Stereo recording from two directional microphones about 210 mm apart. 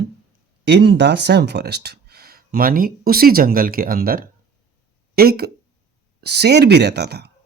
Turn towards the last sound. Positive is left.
turn(degrees=-50)  # may be behind; listen again after turning